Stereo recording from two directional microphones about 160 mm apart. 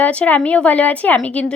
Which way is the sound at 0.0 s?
10° left (ahead or behind).